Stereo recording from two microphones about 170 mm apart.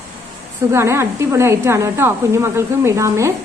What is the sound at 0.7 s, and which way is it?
A woman's voice, 15° right (ahead or behind).